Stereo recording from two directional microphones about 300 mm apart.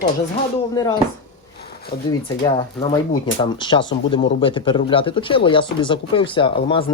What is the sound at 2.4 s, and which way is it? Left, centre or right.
Speech, centre.